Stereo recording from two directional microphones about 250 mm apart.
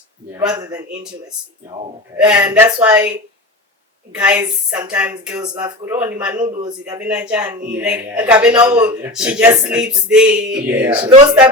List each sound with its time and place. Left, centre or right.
0.3 s speech: centre
2.1 s speech: centre
7.0 s speech: centre